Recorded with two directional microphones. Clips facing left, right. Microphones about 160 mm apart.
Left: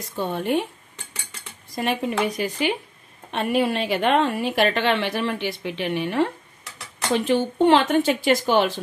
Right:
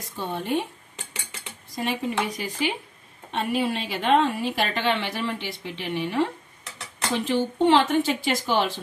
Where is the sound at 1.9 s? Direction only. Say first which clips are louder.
Left 4 dB; 65° left (ahead or behind).